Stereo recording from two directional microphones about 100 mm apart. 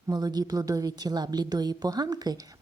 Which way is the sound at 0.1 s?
40° right (ahead or behind).